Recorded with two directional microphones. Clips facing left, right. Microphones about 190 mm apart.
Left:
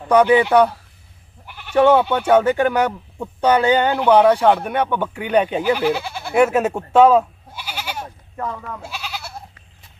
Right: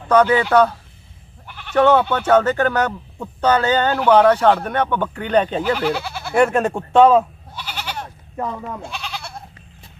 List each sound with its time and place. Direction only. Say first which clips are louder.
0.1 s speech: left 1 dB; 15° left (ahead or behind)
6.3 s goat: left 1 dB; 5° left (ahead or behind)
8.4 s speech: right 2 dB; 20° right (ahead or behind)
8.8 s goat: right 1 dB; 5° left (ahead or behind)